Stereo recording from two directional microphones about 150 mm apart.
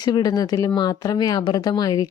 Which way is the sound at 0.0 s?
25° left (ahead or behind).